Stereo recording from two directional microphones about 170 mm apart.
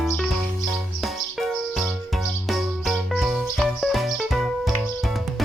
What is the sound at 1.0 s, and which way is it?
Music, centre (ahead or behind).